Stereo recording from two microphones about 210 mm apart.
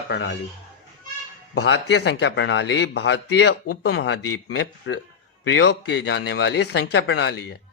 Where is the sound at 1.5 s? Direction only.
55° left (ahead or behind).